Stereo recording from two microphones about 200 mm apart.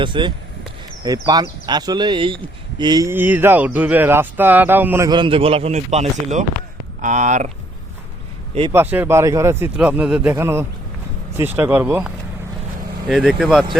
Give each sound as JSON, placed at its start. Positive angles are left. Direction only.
{"t": 0.0, "sound": "a man's voice", "side_deg": -25}
{"t": 5.0, "sound": "a man's voice", "side_deg": -25}
{"t": 8.7, "sound": "speech", "side_deg": -10}